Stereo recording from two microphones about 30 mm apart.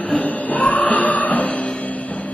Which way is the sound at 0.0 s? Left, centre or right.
Left.